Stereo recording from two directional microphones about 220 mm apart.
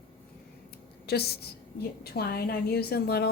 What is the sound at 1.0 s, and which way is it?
A woman's voice, 45° left (ahead or behind).